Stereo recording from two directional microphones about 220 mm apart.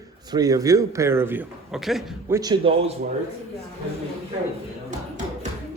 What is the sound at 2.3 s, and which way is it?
Speech, 15° right (ahead or behind).